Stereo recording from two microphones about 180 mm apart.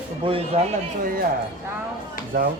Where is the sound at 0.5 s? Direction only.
35° right (ahead or behind).